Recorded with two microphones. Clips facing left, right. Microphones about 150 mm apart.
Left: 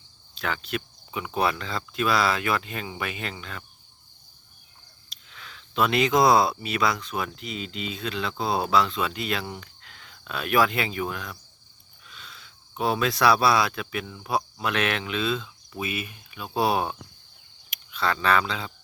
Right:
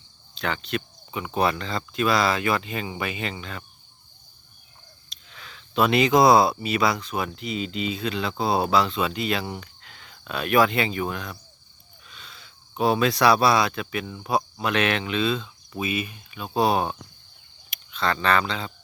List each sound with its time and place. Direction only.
0.3 s speech: 5° left (ahead or behind)
5.0 s speech: centre (ahead or behind)